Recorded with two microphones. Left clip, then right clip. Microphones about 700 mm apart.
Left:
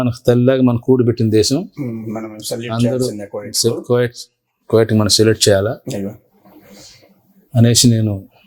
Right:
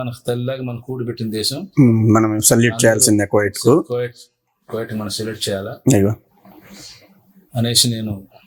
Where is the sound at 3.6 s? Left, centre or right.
Left.